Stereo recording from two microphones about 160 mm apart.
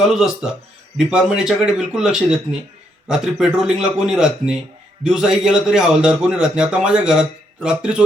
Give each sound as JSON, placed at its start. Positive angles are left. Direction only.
{"t": 0.1, "sound": "speech", "side_deg": -5}